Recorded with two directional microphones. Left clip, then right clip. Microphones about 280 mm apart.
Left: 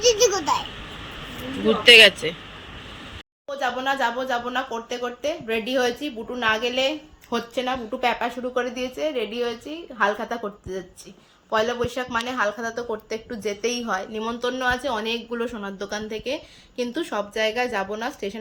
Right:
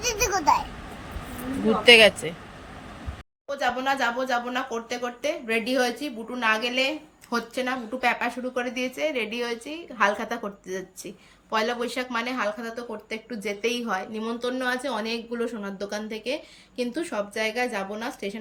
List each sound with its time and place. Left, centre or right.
0.1 s speech: centre
1.6 s speech: centre
3.6 s speech: centre